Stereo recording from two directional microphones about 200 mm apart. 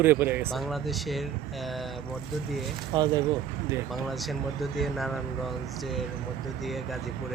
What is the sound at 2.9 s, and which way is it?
Speech, 20° right (ahead or behind).